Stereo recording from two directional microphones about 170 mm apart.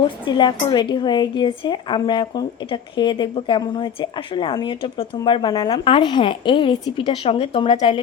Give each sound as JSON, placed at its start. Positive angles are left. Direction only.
{"t": 0.3, "sound": "a woman's voice", "side_deg": 25}